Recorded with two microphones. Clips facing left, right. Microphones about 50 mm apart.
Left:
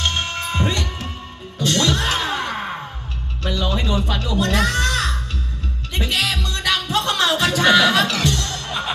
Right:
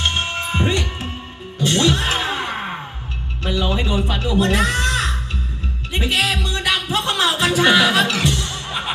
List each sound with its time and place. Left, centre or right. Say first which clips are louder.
0.0 s music: right 1 dB; right
3.4 s caw: right 2 dB; right
5.9 s music: right 2 dB; right